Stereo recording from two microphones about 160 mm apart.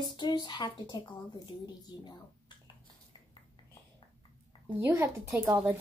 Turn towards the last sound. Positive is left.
turn(degrees=-15)  # may be behind; listen again after turning